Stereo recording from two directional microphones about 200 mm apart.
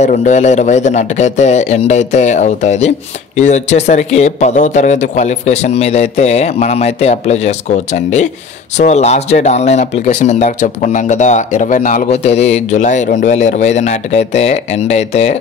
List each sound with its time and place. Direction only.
0.0 s speech: 40° left (ahead or behind)